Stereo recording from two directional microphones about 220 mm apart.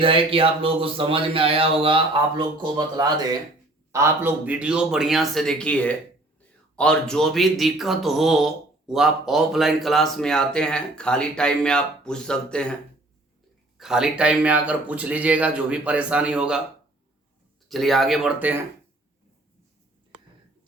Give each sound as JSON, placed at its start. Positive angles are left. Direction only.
{"t": 0.0, "sound": "speech", "side_deg": -25}
{"t": 13.7, "sound": "speech", "side_deg": -5}
{"t": 17.7, "sound": "speech", "side_deg": 0}